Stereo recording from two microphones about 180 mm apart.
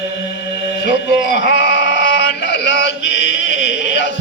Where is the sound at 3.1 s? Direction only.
80° left.